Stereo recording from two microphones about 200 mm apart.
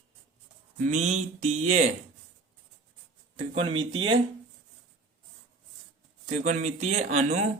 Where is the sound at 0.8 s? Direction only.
35° right (ahead or behind).